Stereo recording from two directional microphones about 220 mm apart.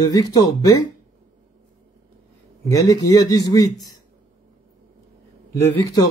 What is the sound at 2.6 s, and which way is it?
A man's voice, 15° left (ahead or behind).